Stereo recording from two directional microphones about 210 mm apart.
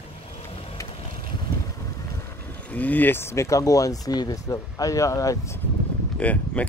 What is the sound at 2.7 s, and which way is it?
Speech, 5° left (ahead or behind).